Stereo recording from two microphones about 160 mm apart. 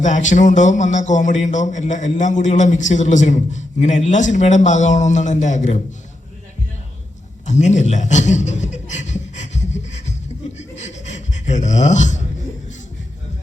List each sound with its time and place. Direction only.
0.0 s a man's voice: 50° left (ahead or behind)
7.4 s chuckle: 45° left (ahead or behind)
10.6 s a sound: 45° left (ahead or behind)